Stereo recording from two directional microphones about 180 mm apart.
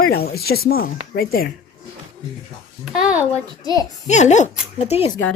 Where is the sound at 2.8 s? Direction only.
5° right (ahead or behind).